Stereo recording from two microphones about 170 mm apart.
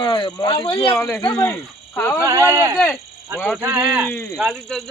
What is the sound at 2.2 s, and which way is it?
Speech, 20° right (ahead or behind).